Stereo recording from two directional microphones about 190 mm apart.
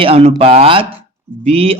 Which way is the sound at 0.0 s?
30° right (ahead or behind).